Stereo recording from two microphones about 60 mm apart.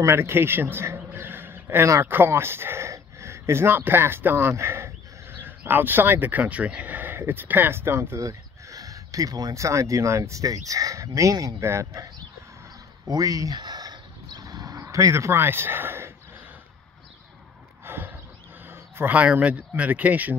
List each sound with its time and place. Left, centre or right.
0.0 s a man's voice: right
8.2 s speech: right
13.1 s speech: right
14.4 s a sound: right
15.1 s speech: right
17.8 s horse: right
18.7 s a sound: right
19.1 s speech: right